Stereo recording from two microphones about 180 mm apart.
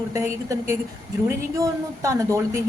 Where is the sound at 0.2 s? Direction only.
15° right (ahead or behind).